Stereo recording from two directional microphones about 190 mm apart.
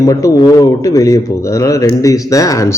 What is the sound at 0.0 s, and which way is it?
A man's voice, 15° left (ahead or behind).